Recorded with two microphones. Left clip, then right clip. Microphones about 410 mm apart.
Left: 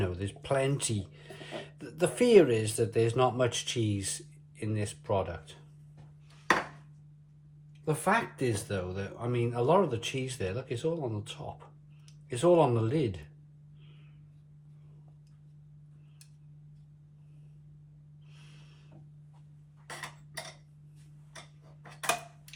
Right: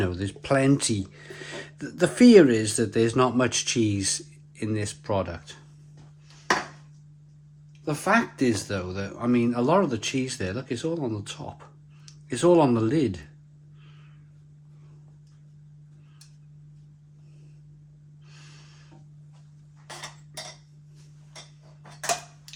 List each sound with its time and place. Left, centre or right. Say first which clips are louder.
0.0 s speech: right 6 dB; right
8.0 s speech: right 7 dB; centre